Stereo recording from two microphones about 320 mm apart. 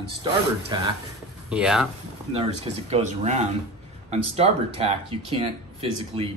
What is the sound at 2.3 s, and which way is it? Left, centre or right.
Speech, centre.